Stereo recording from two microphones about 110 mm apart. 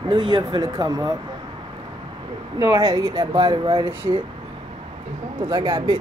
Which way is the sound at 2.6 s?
30° right (ahead or behind).